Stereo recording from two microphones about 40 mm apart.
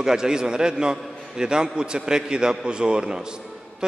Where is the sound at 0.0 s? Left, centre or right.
Centre.